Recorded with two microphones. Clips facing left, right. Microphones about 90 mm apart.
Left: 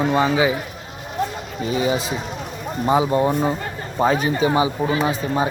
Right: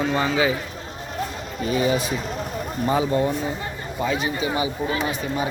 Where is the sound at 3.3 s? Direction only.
45° left (ahead or behind).